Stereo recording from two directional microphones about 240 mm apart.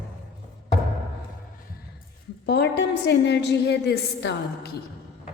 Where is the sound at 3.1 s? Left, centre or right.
Left.